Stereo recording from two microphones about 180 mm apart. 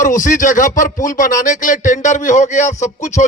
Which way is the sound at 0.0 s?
45° left (ahead or behind).